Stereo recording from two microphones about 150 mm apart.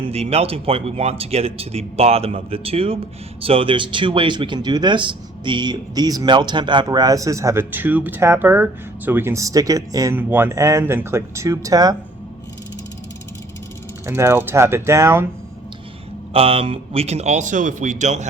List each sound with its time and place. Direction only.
0.0 s speech: 40° right (ahead or behind); by 10.2 s 25° right (ahead or behind)
10.2 s speech: 15° right (ahead or behind)
14.1 s speech: 15° right (ahead or behind)
16.3 s speech: 40° right (ahead or behind)